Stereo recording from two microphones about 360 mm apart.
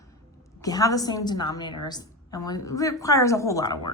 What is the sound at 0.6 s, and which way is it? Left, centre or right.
Speech, centre.